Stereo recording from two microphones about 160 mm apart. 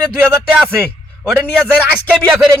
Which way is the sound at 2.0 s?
5° left (ahead or behind).